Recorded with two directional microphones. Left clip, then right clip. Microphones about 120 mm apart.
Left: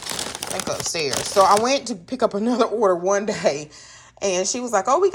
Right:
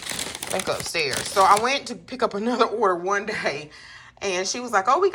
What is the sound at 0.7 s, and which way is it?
Speech, 30° left (ahead or behind).